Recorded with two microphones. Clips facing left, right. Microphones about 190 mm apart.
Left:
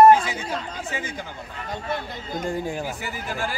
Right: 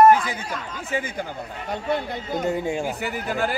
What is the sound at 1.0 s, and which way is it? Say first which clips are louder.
Speech: right 4 dB; 55° right (ahead or behind).